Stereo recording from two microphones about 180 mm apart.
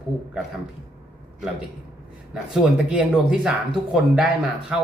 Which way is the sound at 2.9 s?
5° right (ahead or behind).